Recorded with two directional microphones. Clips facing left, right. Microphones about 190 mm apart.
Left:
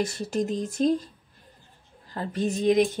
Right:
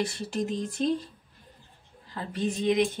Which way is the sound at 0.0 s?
45° left (ahead or behind).